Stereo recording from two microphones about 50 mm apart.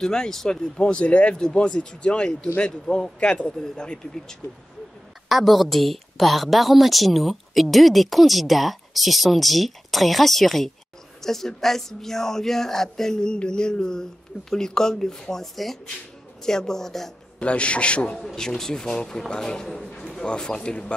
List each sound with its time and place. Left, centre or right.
0.0 s speech: centre
5.3 s a woman's voice: centre
17.4 s a man's voice: left
18.2 s speech: centre